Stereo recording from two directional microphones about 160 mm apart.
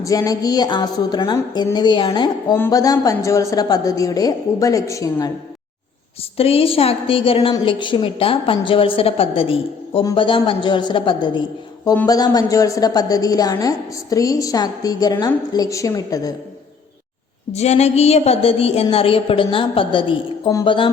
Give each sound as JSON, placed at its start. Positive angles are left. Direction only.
{"t": 0.0, "sound": "a woman's voice", "side_deg": 20}
{"t": 2.5, "sound": "a woman's voice", "side_deg": 20}
{"t": 6.3, "sound": "a woman's voice", "side_deg": 35}
{"t": 17.5, "sound": "a woman's voice", "side_deg": 40}